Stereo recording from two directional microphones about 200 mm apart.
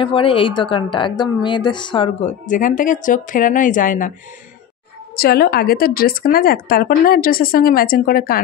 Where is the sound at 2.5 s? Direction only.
40° left (ahead or behind).